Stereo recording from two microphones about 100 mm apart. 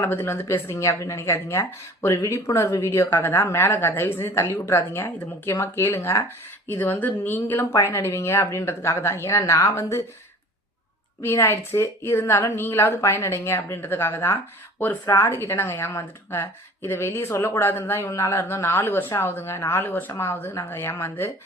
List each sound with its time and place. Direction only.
0.0 s a woman's voice: 25° left (ahead or behind)
9.4 s a woman's voice: 45° left (ahead or behind)
11.2 s a woman's voice: 25° left (ahead or behind)